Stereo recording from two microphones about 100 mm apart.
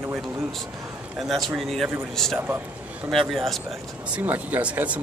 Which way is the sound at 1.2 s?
Centre (ahead or behind).